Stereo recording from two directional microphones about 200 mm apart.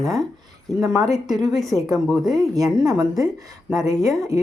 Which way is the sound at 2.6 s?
15° right (ahead or behind).